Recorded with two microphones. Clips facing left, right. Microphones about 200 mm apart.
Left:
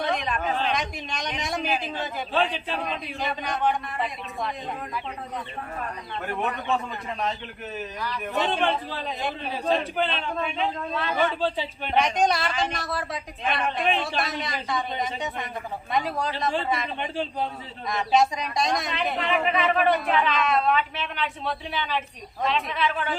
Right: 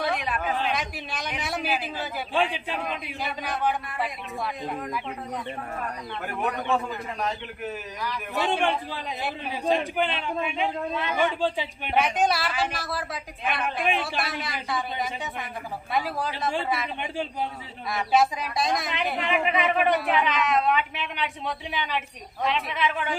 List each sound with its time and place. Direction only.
0.0 s a man's voice: 10° right (ahead or behind)
7.6 s a man's voice: 10° right (ahead or behind)
19.1 s a man's voice: 15° right (ahead or behind)